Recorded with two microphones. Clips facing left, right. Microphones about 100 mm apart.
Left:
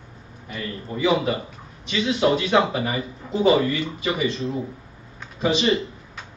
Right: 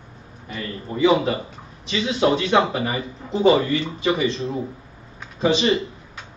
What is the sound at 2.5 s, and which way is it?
A man's voice, 25° right (ahead or behind).